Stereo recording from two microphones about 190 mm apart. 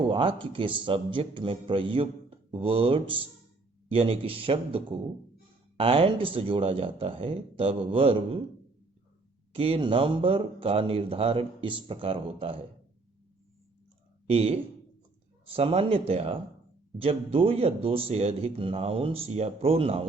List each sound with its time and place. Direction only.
0.1 s a man's voice: 25° right (ahead or behind)
9.5 s a man's voice: 30° right (ahead or behind)
14.3 s a man's voice: 30° right (ahead or behind)